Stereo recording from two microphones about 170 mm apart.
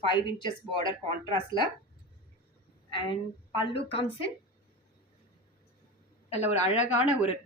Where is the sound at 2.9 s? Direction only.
30° left (ahead or behind).